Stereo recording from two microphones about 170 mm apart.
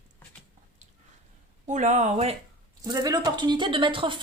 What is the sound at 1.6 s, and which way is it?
Speech, 45° right (ahead or behind).